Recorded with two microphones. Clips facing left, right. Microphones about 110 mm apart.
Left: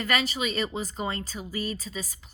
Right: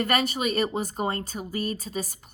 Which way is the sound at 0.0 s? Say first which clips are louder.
Right 3 dB; 50° right (ahead or behind).